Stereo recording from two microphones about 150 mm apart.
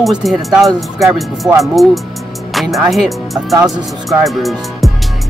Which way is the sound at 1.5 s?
5° right (ahead or behind).